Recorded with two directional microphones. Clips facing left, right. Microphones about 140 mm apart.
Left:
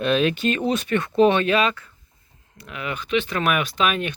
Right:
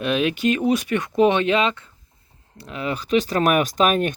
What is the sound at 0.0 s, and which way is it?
Speech, 10° right (ahead or behind).